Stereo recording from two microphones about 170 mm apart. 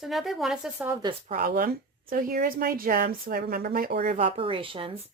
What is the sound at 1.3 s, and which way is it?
Speech, 55° right (ahead or behind).